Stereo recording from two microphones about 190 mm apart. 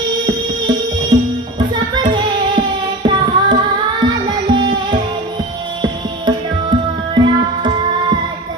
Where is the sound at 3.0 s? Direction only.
25° right (ahead or behind).